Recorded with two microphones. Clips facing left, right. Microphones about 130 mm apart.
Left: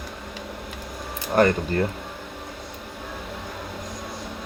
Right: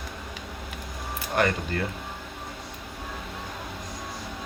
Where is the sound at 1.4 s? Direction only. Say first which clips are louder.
Left 6 dB; 35° left (ahead or behind).